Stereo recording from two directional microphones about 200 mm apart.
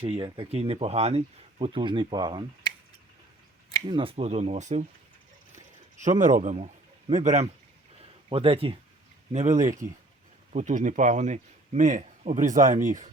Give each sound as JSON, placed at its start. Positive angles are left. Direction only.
{"t": 0.0, "sound": "speech", "side_deg": -25}
{"t": 3.8, "sound": "speech", "side_deg": -25}
{"t": 6.0, "sound": "speech", "side_deg": -40}